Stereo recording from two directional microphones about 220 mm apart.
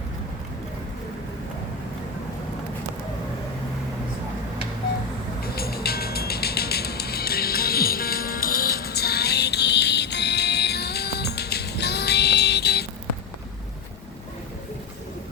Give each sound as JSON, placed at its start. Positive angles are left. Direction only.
{"t": 5.5, "sound": "music", "side_deg": 45}